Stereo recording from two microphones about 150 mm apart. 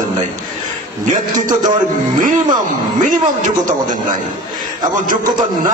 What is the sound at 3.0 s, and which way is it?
Speech, 60° right (ahead or behind).